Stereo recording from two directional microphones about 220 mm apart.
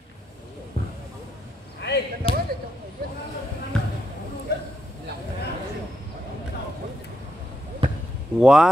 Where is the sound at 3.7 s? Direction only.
5° left (ahead or behind).